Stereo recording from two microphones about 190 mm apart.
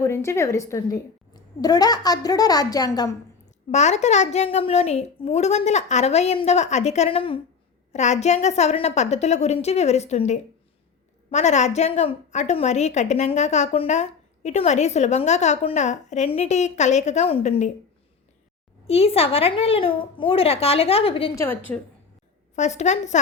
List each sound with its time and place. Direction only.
0.0 s a woman's voice: 15° left (ahead or behind)
3.7 s a woman's voice: 35° left (ahead or behind)
18.9 s a woman's voice: 30° left (ahead or behind)
21.3 s a woman's voice: 15° left (ahead or behind)
22.5 s a woman's voice: 40° left (ahead or behind)